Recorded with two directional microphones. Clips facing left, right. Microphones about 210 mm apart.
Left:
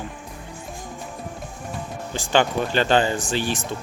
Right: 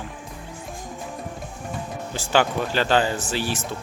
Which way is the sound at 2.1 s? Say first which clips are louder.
Left 1 dB; 5° right (ahead or behind).